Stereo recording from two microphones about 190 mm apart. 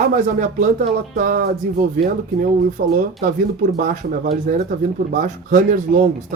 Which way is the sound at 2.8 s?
50° right (ahead or behind).